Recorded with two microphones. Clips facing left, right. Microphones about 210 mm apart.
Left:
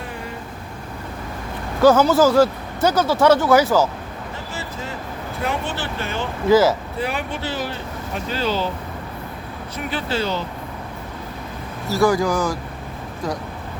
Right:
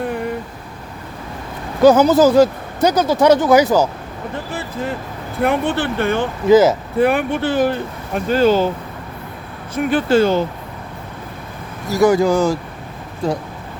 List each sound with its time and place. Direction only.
1.8 s speech: 15° right (ahead or behind)
4.5 s vehicle: 55° right (ahead or behind)
5.4 s speech: 55° right (ahead or behind)
6.5 s speech: 20° right (ahead or behind)
7.0 s speech: 55° right (ahead or behind)
9.7 s speech: 50° right (ahead or behind)
11.9 s speech: 20° right (ahead or behind)